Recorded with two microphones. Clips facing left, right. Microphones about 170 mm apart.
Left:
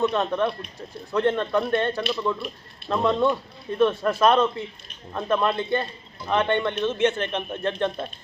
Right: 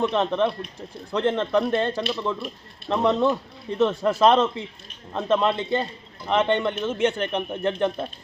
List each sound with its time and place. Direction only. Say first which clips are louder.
0.0 s a man's voice: right 1 dB; 15° right (ahead or behind)